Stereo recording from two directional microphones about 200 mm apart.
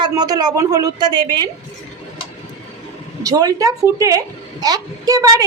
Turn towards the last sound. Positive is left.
turn(degrees=-20)  # may be behind; listen again after turning